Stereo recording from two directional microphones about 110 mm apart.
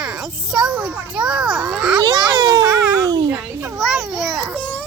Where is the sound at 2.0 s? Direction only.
40° right (ahead or behind).